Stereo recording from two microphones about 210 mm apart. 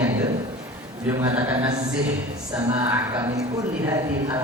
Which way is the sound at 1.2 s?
10° right (ahead or behind).